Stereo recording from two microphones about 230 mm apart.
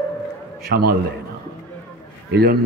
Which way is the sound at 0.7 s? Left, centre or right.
Right.